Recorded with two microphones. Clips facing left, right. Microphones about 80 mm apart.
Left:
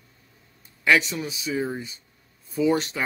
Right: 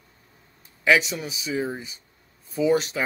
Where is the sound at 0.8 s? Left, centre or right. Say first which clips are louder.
Right 1 dB; centre.